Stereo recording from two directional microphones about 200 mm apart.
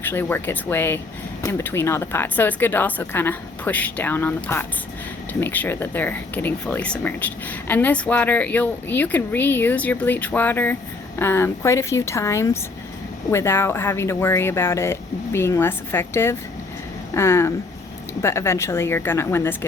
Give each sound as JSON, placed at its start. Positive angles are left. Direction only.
{"t": 0.0, "sound": "speech", "side_deg": 10}